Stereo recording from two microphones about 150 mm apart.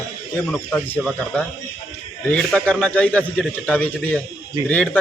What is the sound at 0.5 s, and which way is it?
A man's voice, 5° left (ahead or behind).